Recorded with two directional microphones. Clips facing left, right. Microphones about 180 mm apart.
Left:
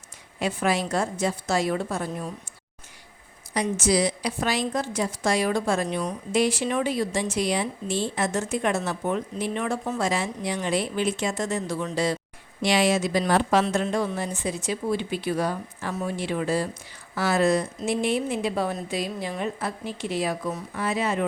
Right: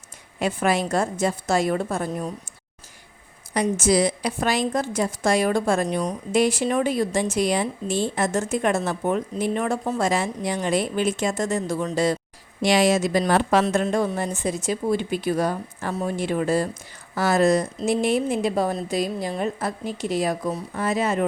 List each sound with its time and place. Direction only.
0.3 s a woman's voice: 55° right (ahead or behind)
3.5 s a woman's voice: 50° right (ahead or behind)